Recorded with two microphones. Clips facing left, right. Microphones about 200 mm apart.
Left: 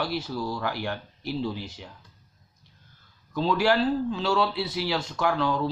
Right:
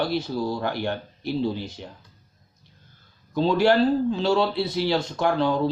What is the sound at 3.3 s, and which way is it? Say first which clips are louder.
Speech: right 4 dB; 25° right (ahead or behind).